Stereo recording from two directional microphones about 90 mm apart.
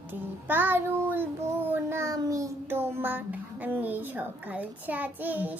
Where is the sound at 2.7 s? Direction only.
25° right (ahead or behind).